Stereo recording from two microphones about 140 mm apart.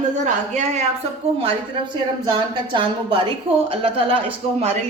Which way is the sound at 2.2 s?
35° right (ahead or behind).